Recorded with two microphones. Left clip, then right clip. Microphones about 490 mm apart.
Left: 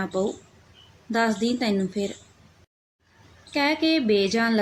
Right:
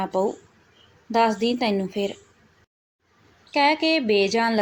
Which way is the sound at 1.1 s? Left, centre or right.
Left.